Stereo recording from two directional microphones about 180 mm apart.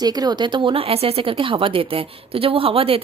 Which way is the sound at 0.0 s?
20° right (ahead or behind).